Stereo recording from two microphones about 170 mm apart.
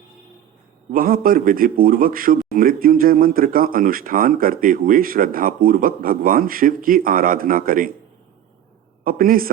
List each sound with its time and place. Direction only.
0.9 s a man's voice: 55° right (ahead or behind)
9.0 s a man's voice: 55° right (ahead or behind)